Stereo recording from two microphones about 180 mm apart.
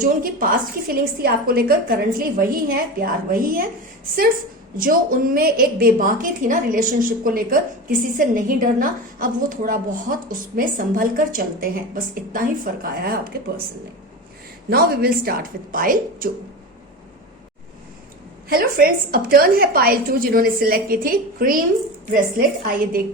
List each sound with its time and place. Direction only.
0.0 s a woman's voice: 50° right (ahead or behind)
4.8 s a woman's voice: 50° right (ahead or behind)
14.7 s a woman's voice: 55° right (ahead or behind)
18.4 s a woman's voice: 55° right (ahead or behind)